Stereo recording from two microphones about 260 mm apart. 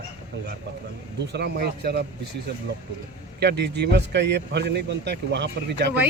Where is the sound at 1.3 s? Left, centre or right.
Right.